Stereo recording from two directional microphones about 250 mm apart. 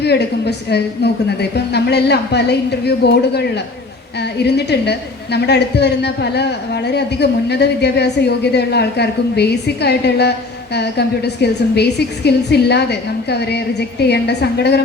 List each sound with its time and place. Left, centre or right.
0.0 s a woman's voice: left